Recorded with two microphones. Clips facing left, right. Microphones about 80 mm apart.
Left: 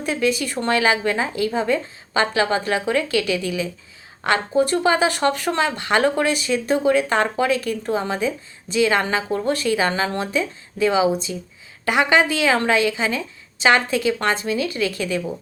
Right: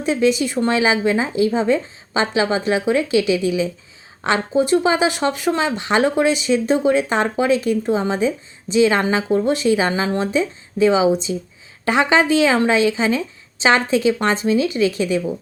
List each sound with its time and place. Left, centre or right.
0.0 s speech: right